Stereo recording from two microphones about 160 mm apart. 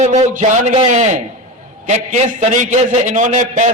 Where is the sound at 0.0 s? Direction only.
50° right (ahead or behind).